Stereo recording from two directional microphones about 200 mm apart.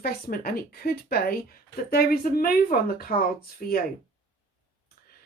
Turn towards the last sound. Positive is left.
turn(degrees=50)  # may be behind; listen again after turning